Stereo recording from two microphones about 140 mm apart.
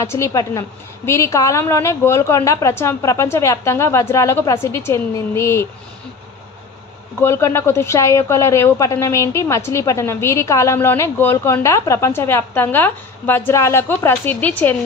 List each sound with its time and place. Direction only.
0.0 s speech: 20° left (ahead or behind)
7.2 s speech: 20° left (ahead or behind)